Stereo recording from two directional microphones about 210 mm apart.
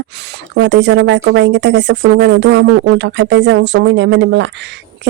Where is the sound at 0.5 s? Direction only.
55° right (ahead or behind).